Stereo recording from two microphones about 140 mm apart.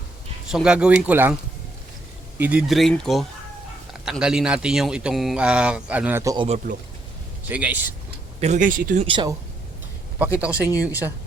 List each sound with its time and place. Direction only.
0.5 s a man's voice: 5° right (ahead or behind)
2.4 s a man's voice: 10° right (ahead or behind)
6.2 s speech: 30° right (ahead or behind)
7.4 s a man's voice: 10° right (ahead or behind)
8.4 s speech: 60° right (ahead or behind)
9.0 s speech: 35° right (ahead or behind)
10.4 s a man's voice: 10° right (ahead or behind)